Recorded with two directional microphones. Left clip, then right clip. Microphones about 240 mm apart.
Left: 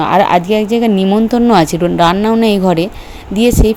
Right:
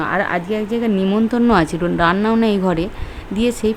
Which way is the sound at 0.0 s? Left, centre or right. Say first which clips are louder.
Left 9 dB; centre.